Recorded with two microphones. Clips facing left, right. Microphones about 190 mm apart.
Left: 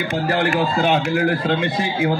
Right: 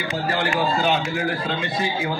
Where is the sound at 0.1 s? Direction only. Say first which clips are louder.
Left 4 dB; 55° left (ahead or behind).